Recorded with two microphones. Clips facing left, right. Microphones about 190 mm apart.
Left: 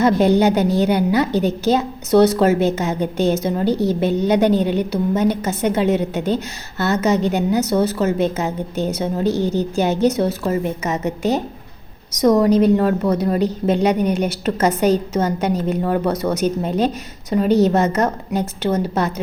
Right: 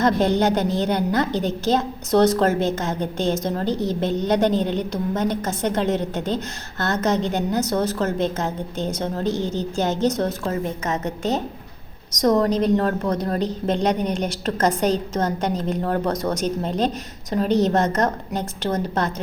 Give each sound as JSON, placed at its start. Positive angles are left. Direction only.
{"t": 0.0, "sound": "a woman's voice", "side_deg": 10}